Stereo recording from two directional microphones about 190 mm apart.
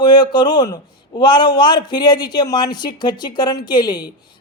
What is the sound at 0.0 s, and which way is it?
A man's voice, 20° left (ahead or behind).